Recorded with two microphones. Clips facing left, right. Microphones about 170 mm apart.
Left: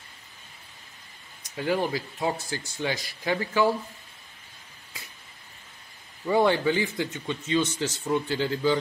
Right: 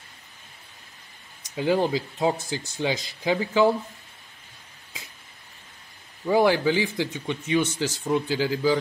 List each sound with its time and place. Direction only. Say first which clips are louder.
1.5 s speech: right 4 dB; 20° right (ahead or behind)
6.2 s speech: right 2 dB; 5° right (ahead or behind)
6.7 s a man's voice: right 2 dB; 90° right
7.1 s speech: right 2 dB; 15° right (ahead or behind)